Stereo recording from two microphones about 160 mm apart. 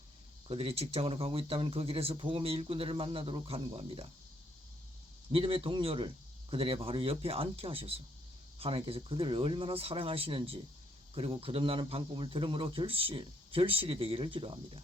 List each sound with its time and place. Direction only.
0.4 s speech: 35° right (ahead or behind)
5.3 s speech: 35° right (ahead or behind)